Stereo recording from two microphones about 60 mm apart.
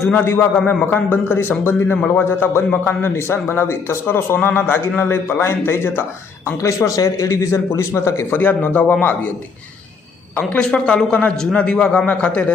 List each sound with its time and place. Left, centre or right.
0.1 s speech: left
0.5 s a man's voice: left
0.9 s speech: left
6.6 s speech: left
8.3 s speech: left
10.7 s a man's voice: centre